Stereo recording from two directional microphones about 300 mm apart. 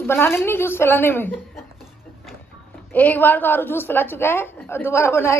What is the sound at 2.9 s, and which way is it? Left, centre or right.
A woman's voice, centre.